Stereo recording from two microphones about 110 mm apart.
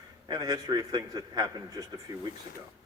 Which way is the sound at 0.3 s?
35° right (ahead or behind).